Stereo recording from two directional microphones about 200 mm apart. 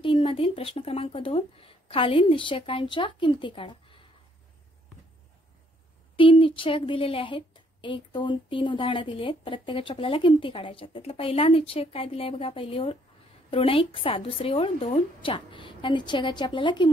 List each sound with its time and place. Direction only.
0.0 s a woman's voice: 25° left (ahead or behind)
6.1 s a woman's voice: 25° left (ahead or behind)